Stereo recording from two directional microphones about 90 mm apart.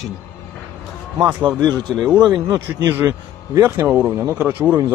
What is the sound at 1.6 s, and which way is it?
Speech, 50° right (ahead or behind).